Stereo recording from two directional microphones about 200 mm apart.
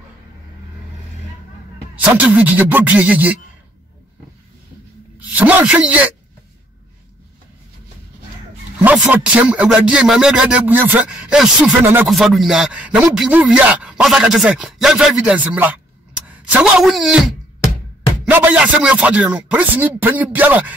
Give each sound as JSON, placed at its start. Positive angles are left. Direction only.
{"t": 2.0, "sound": "speech", "side_deg": -5}
{"t": 5.3, "sound": "speech", "side_deg": -5}
{"t": 8.8, "sound": "a woman's voice", "side_deg": -5}